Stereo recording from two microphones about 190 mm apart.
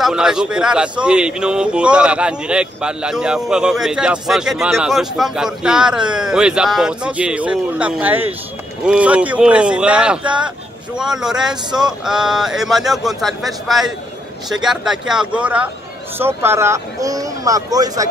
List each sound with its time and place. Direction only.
0.0 s speech: 5° right (ahead or behind); by 18.0 s 20° right (ahead or behind)